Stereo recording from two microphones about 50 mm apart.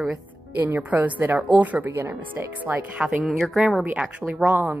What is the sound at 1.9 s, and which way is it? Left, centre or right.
Speech, right.